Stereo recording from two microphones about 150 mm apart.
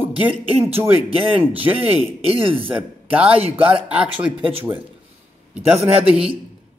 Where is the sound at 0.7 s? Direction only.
40° right (ahead or behind).